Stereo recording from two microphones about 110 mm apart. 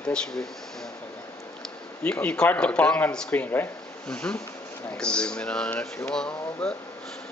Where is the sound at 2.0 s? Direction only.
10° left (ahead or behind).